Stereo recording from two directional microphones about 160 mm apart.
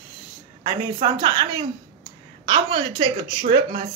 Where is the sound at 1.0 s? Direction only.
30° right (ahead or behind).